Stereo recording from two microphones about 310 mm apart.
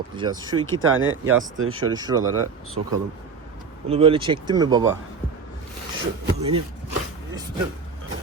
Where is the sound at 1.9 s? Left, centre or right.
Centre.